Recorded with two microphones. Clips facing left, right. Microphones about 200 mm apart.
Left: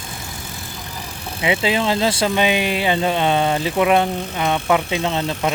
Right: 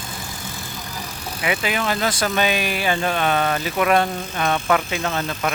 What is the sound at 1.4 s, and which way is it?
Speech, 25° left (ahead or behind).